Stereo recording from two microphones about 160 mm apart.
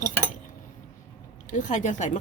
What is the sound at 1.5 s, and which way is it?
Speech, 50° left (ahead or behind).